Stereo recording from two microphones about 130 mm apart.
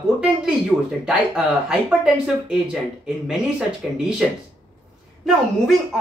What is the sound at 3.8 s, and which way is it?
Speech, 5° right (ahead or behind).